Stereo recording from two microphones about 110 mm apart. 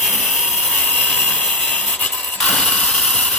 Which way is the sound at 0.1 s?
15° left (ahead or behind).